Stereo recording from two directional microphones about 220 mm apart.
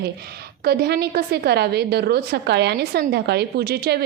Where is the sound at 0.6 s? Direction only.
45° right (ahead or behind).